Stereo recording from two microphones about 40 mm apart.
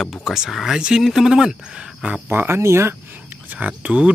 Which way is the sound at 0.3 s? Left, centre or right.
Centre.